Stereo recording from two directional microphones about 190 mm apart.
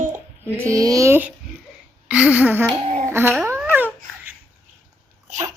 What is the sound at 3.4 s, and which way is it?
Babbling, 10° right (ahead or behind).